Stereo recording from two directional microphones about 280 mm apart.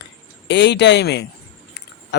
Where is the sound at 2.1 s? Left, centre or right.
Left.